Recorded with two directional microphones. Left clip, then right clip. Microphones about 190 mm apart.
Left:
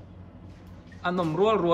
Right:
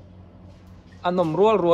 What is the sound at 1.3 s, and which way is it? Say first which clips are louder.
Speech: right 5 dB; 15° right (ahead or behind).